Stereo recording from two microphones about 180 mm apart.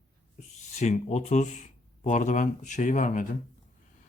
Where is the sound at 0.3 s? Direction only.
40° left (ahead or behind).